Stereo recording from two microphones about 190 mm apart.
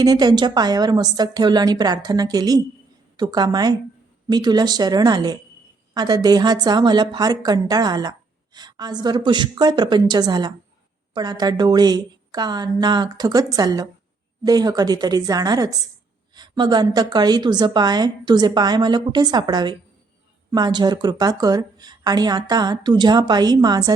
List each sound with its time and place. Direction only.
0.0 s a woman's voice: 20° right (ahead or behind)